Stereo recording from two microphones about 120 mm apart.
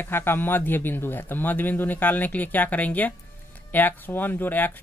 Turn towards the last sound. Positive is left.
turn(degrees=15)  # may be behind; listen again after turning